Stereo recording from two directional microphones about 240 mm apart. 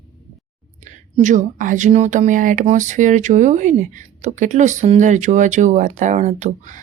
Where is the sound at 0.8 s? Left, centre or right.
Right.